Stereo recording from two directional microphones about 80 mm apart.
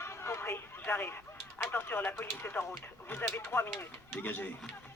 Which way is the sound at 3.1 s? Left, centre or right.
Left.